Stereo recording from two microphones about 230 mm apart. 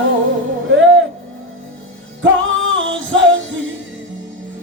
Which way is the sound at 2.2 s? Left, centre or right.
Right.